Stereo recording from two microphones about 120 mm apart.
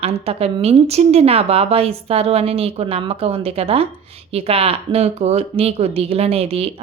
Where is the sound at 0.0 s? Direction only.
55° right (ahead or behind).